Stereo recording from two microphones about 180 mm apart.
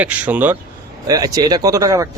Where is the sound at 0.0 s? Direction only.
10° right (ahead or behind).